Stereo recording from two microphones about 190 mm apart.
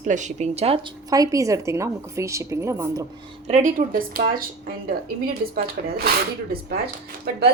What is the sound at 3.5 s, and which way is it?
A woman's voice, 40° right (ahead or behind).